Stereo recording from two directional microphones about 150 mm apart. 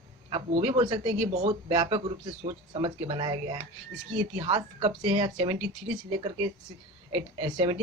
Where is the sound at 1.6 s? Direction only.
30° right (ahead or behind).